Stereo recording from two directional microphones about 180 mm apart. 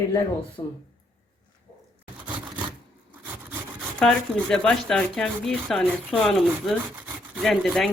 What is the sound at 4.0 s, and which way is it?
Speech, 5° left (ahead or behind).